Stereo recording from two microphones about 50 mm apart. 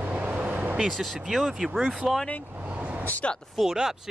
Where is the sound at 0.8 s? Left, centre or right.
Centre.